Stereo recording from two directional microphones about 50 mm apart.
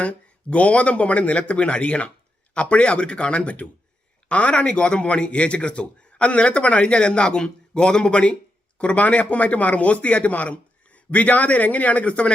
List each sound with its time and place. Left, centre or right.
0.0 s a man's voice: left